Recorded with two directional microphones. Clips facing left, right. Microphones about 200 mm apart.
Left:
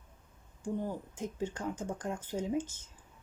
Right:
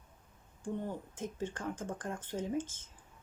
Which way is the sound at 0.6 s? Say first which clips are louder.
Left 2 dB; 10° left (ahead or behind).